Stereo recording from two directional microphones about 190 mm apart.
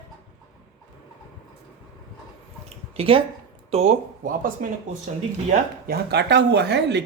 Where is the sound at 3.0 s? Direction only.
30° right (ahead or behind).